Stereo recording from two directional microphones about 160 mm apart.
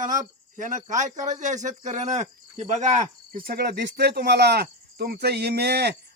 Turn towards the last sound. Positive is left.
turn(degrees=-90)